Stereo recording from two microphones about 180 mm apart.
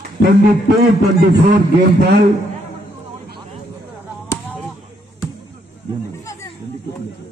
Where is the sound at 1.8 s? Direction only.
70° right (ahead or behind).